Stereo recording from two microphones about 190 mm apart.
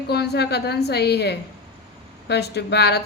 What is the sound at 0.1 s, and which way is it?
A woman's voice, 60° left (ahead or behind).